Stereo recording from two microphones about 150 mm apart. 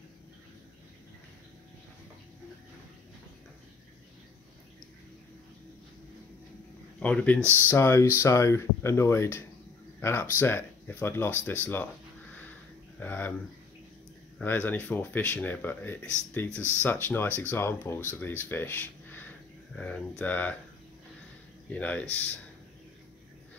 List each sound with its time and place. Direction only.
7.0 s speech: 10° left (ahead or behind)
13.0 s speech: 10° left (ahead or behind)
14.4 s speech: 10° left (ahead or behind)
21.6 s speech: 10° left (ahead or behind)